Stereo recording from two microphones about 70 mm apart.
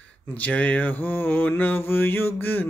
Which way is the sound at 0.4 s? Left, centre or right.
Left.